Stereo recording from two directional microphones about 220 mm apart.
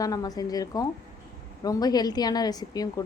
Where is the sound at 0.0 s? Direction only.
15° left (ahead or behind).